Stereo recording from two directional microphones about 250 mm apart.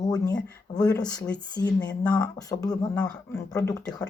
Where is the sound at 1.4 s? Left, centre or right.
Centre.